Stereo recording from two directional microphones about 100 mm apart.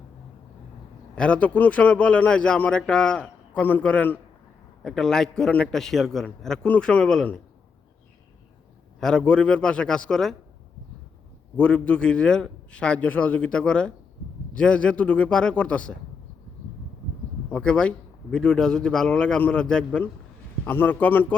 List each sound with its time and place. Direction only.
1.1 s a man's voice: 10° left (ahead or behind)
4.8 s a man's voice: 5° left (ahead or behind)
9.0 s a man's voice: 5° left (ahead or behind)
11.5 s a man's voice: 10° left (ahead or behind)
17.5 s a man's voice: 10° left (ahead or behind)
20.7 s a man's voice: 20° left (ahead or behind)